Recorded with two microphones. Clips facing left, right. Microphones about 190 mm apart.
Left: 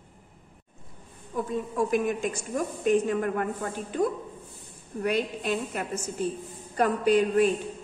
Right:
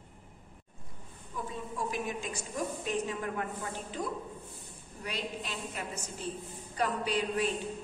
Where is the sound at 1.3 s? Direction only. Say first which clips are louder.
Left 10 dB; 50° left (ahead or behind).